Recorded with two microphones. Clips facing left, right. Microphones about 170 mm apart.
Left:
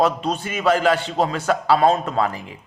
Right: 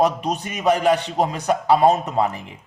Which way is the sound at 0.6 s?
15° right (ahead or behind).